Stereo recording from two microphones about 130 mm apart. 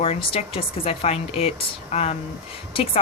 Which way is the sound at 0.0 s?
45° left (ahead or behind).